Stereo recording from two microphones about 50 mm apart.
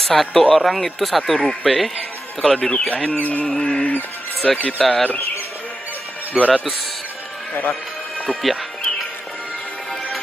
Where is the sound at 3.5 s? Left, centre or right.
Centre.